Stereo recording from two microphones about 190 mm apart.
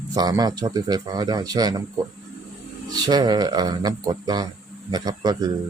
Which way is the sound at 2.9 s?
20° right (ahead or behind).